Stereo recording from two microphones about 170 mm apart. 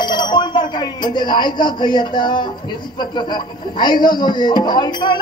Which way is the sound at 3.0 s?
25° left (ahead or behind).